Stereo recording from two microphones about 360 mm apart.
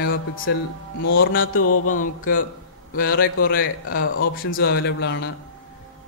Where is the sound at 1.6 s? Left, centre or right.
Left.